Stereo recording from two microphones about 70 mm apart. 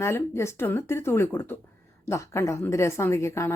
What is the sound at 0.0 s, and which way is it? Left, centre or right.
A woman's voice, left.